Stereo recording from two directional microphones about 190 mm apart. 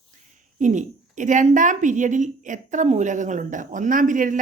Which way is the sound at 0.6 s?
40° right (ahead or behind).